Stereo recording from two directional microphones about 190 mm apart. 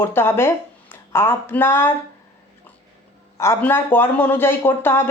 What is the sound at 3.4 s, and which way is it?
Speech, 10° left (ahead or behind).